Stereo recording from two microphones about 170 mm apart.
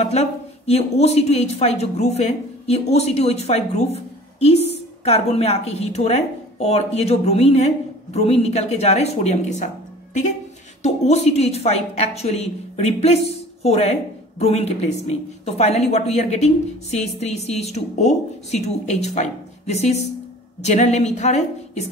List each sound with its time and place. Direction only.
0.0 s a woman's voice: 40° left (ahead or behind)
10.8 s a woman's voice: 40° left (ahead or behind)